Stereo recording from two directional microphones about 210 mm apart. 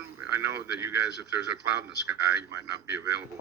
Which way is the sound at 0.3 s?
10° right (ahead or behind).